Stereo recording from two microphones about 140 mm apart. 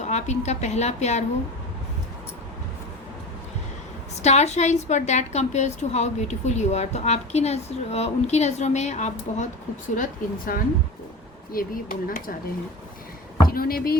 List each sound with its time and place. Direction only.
0.0 s a woman's voice: 55° left (ahead or behind)
4.2 s a woman's voice: 50° left (ahead or behind)
9.9 s speech: 80° left
13.5 s speech: 90° left